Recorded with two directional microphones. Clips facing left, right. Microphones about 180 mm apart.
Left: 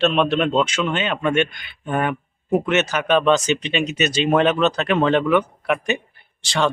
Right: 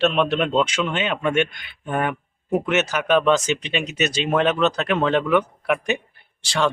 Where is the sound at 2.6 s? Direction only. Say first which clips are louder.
Left 1 dB; 5° right (ahead or behind).